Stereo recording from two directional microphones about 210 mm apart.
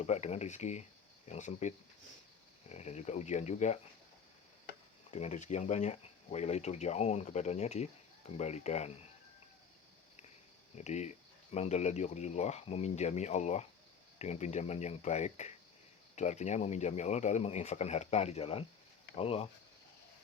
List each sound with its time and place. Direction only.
0.0 s speech: 35° left (ahead or behind)
5.1 s speech: 35° left (ahead or behind)
10.8 s speech: 35° left (ahead or behind)